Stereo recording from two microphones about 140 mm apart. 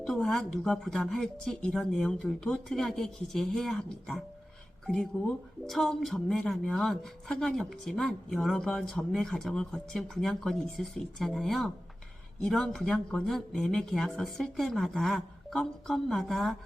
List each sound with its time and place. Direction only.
0.0 s speech: 5° left (ahead or behind)
5.6 s speech: centre (ahead or behind)